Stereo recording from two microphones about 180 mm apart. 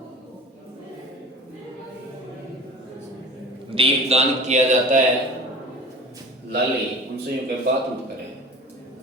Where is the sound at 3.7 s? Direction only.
35° right (ahead or behind).